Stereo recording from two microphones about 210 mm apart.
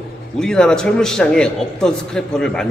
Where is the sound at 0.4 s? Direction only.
5° left (ahead or behind).